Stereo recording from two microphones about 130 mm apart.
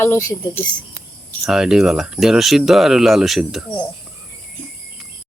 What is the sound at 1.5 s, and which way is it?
Speech, 5° right (ahead or behind).